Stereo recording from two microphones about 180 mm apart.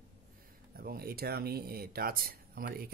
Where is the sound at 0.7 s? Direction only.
55° right (ahead or behind).